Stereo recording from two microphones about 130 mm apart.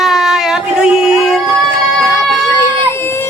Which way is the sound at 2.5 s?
20° left (ahead or behind).